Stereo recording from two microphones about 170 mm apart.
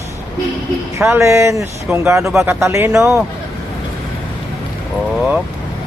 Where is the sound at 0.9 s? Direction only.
15° right (ahead or behind).